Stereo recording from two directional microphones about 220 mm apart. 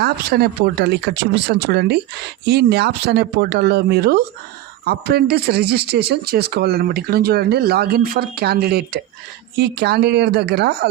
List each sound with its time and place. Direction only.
0.0 s speech: 45° right (ahead or behind)